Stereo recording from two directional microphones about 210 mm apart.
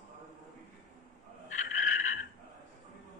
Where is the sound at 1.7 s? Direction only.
35° left (ahead or behind).